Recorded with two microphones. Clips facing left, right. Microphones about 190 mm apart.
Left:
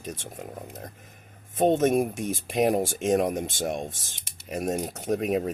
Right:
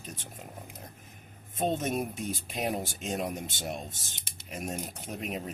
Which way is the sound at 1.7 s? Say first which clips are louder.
Left 10 dB; 65° left (ahead or behind).